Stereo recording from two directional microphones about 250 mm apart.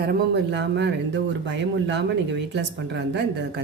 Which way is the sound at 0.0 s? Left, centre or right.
Right.